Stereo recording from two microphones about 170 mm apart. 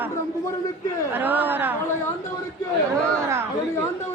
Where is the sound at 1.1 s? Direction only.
10° right (ahead or behind).